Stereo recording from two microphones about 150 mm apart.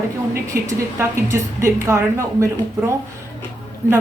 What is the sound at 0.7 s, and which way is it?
A woman's voice, 20° right (ahead or behind).